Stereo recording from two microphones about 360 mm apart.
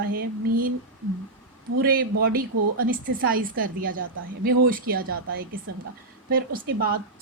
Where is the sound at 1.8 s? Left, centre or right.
Right.